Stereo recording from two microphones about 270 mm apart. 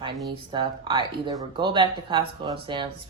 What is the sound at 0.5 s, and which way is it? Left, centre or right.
Speech, centre.